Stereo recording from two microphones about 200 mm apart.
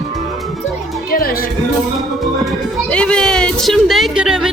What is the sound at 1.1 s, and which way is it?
Speech, 50° left (ahead or behind).